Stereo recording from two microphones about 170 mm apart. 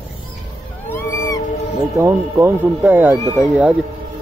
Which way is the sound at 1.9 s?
15° right (ahead or behind).